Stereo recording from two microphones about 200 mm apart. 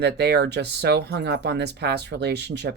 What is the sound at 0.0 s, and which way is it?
Speech, 55° right (ahead or behind).